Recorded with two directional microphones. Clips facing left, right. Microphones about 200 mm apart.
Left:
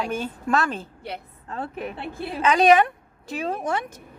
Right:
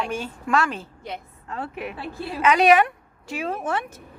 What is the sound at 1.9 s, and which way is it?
Speech, 25° left (ahead or behind).